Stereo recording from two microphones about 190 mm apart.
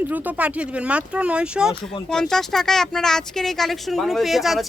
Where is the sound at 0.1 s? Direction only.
10° right (ahead or behind).